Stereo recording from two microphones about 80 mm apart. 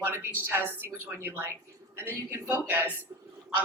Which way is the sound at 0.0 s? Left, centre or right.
Right.